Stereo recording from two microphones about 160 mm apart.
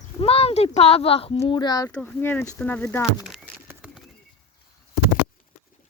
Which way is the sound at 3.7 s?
5° right (ahead or behind).